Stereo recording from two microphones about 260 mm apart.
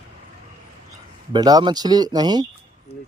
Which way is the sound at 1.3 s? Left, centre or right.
Centre.